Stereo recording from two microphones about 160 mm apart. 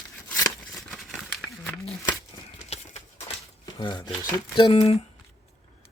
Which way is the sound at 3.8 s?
30° left (ahead or behind).